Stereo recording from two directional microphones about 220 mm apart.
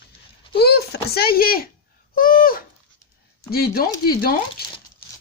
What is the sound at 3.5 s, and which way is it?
Speech, 45° left (ahead or behind).